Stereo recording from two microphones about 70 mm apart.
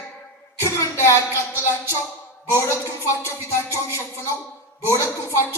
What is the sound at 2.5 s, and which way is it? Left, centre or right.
Speech, left.